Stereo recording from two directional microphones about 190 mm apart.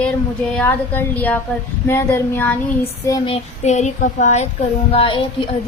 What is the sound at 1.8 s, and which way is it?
Child singing, 10° left (ahead or behind).